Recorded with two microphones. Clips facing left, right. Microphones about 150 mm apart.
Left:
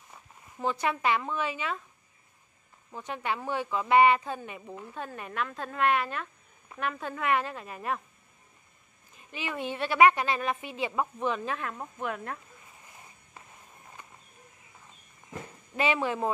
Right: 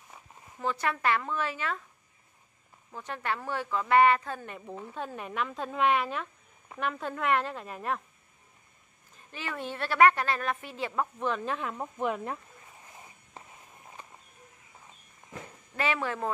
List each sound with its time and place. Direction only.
0.6 s a woman's voice: 20° left (ahead or behind)
2.9 s a woman's voice: 15° left (ahead or behind)
9.3 s a woman's voice: 15° left (ahead or behind); by 11.9 s 5° right (ahead or behind)
15.7 s speech: 20° left (ahead or behind)